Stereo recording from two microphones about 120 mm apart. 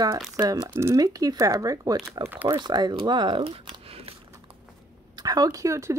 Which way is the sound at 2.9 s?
40° right (ahead or behind).